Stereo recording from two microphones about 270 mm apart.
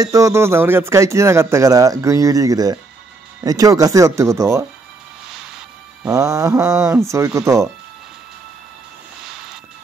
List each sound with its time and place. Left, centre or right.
0.0 s speech: centre
6.0 s speech: centre